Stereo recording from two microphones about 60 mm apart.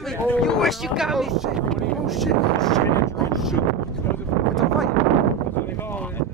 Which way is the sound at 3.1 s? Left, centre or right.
Centre.